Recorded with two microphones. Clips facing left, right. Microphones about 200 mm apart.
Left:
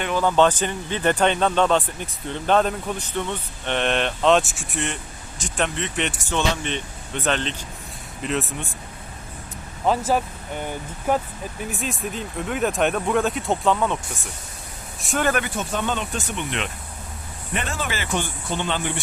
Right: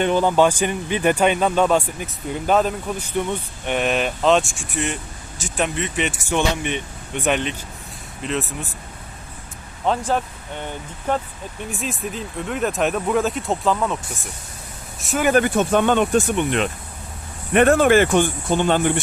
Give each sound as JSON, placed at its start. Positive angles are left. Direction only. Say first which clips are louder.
{"t": 0.0, "sound": "speech", "louder": "right 2 dB", "side_deg": -20}
{"t": 8.2, "sound": "speech", "louder": "even", "side_deg": 0}
{"t": 9.8, "sound": "speech", "louder": "even", "side_deg": 5}
{"t": 15.0, "sound": "speech", "louder": "right 2 dB", "side_deg": -5}
{"t": 15.4, "sound": "speech", "louder": "right 9 dB", "side_deg": -60}